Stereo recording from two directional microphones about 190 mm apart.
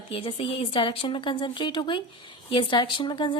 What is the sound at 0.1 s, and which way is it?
A woman's voice, 30° left (ahead or behind).